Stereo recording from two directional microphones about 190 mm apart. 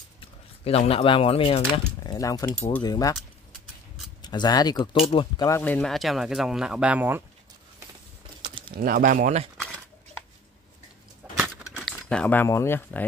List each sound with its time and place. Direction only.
0.7 s speech: 30° left (ahead or behind)
4.2 s speech: 20° left (ahead or behind)
5.6 s speech: 5° left (ahead or behind); by 7.2 s 10° right (ahead or behind)
8.7 s speech: 50° right (ahead or behind)
11.2 s a sound: 5° right (ahead or behind)
11.7 s speech: 5° left (ahead or behind)